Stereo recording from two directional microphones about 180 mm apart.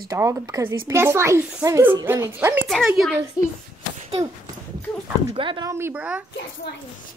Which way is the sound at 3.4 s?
20° left (ahead or behind).